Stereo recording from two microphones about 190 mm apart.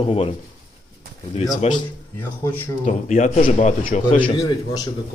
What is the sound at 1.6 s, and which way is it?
Speech, 35° left (ahead or behind).